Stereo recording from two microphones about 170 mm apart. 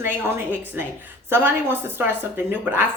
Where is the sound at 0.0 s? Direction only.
10° right (ahead or behind).